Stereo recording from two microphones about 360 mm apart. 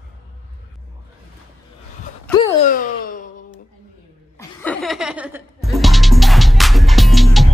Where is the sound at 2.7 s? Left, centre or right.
Left.